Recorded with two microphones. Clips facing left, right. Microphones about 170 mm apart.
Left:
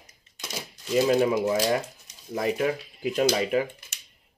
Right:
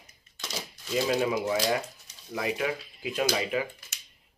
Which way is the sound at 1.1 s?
45° left (ahead or behind).